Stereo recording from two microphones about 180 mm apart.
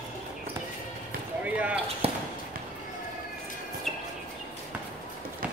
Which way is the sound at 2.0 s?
35° right (ahead or behind).